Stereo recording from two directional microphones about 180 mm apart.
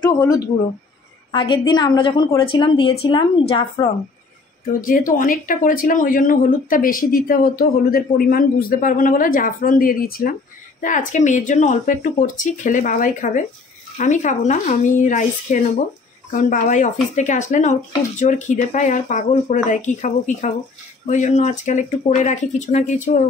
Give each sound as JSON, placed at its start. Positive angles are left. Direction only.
{"t": 1.3, "sound": "a woman's voice", "side_deg": 25}
{"t": 4.8, "sound": "speech", "side_deg": 50}